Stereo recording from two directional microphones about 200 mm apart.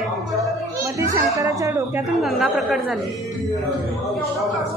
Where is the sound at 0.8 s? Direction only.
15° right (ahead or behind).